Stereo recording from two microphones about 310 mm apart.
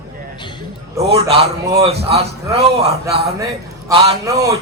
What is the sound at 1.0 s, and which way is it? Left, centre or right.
A man's voice, centre.